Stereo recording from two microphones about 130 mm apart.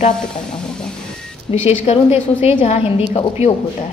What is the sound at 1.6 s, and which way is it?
A woman's voice, 50° left (ahead or behind).